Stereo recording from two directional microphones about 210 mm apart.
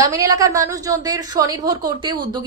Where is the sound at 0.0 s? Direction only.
15° right (ahead or behind).